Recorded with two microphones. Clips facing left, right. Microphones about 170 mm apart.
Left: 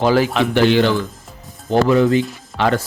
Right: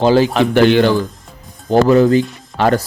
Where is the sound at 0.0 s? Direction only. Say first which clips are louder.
Right 3 dB; 30° right (ahead or behind).